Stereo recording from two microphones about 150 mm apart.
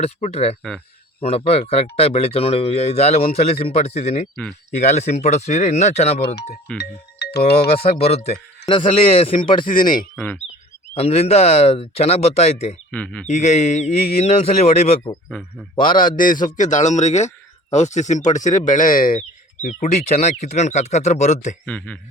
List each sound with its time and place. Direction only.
0.0 s a man's voice: 45° left (ahead or behind)
6.7 s speech: 90° left
7.8 s a man's voice: 40° left (ahead or behind)
8.6 s speech: 35° left (ahead or behind)
10.2 s speech: 10° left (ahead or behind)
10.9 s a man's voice: 45° left (ahead or behind)
12.9 s speech: 10° left (ahead or behind)
13.2 s a man's voice: 50° left (ahead or behind)
15.7 s speech: 30° left (ahead or behind)
16.0 s speech: 65° left (ahead or behind)
19.6 s a man's voice: 50° left (ahead or behind)
21.7 s speech: 10° left (ahead or behind)